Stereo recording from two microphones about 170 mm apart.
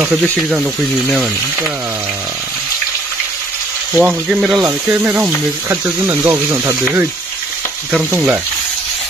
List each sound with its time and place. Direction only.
0.0 s speech: 5° right (ahead or behind)
3.9 s speech: 10° right (ahead or behind)